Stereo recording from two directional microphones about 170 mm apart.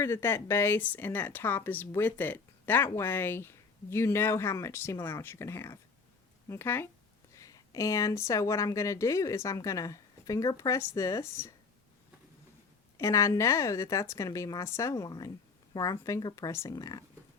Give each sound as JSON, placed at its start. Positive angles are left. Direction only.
{"t": 0.0, "sound": "speech", "side_deg": 15}
{"t": 13.0, "sound": "speech", "side_deg": 20}